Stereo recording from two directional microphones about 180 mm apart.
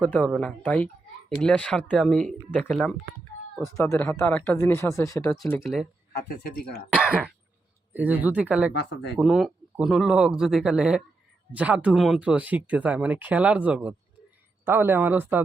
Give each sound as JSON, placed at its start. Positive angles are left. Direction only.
{"t": 0.0, "sound": "speech", "side_deg": 5}
{"t": 3.8, "sound": "speech", "side_deg": 15}
{"t": 5.6, "sound": "speech", "side_deg": 0}
{"t": 6.1, "sound": "speech", "side_deg": 60}
{"t": 6.9, "sound": "speech", "side_deg": -5}
{"t": 8.7, "sound": "speech", "side_deg": 70}
{"t": 9.1, "sound": "speech", "side_deg": 0}